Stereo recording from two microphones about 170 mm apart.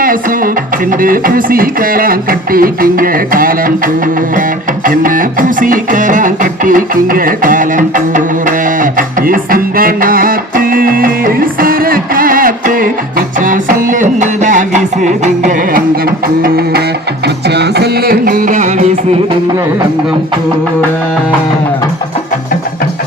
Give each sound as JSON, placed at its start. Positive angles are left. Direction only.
{"t": 0.0, "sound": "music", "side_deg": -55}
{"t": 4.9, "sound": "music", "side_deg": -55}
{"t": 17.2, "sound": "music", "side_deg": -75}